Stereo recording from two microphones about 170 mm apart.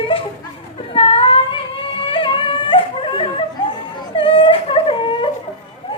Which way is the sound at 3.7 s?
30° left (ahead or behind).